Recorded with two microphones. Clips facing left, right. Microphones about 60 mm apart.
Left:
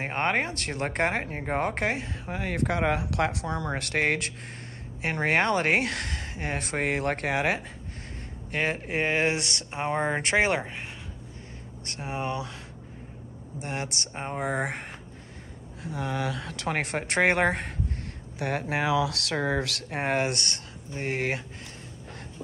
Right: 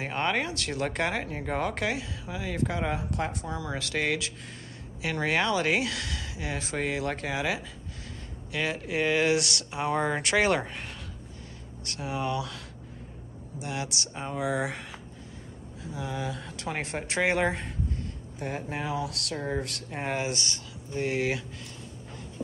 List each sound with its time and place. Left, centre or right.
0.0 s speech: left; by 10.9 s centre
11.8 s speech: left
13.6 s speech: left
15.8 s speech: left
18.4 s speech: left
20.9 s speech: left